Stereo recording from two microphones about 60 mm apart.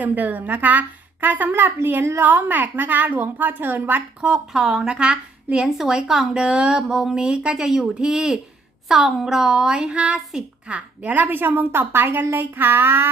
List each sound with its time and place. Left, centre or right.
0.0 s a woman's voice: right
4.2 s speech: centre
5.6 s a woman's voice: centre
11.1 s a woman's voice: right